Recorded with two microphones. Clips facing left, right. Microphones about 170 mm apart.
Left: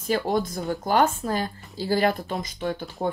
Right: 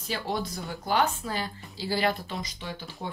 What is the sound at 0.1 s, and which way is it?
Speech, 50° left (ahead or behind).